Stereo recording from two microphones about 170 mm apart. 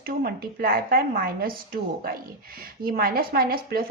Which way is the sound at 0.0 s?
60° right (ahead or behind).